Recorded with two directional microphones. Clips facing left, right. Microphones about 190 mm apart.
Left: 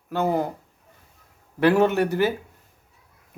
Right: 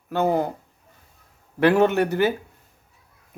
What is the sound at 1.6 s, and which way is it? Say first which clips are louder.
Speech: right 1 dB; 5° left (ahead or behind).